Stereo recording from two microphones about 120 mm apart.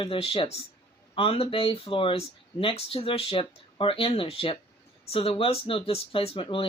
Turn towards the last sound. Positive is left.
turn(degrees=50)  # may be behind; listen again after turning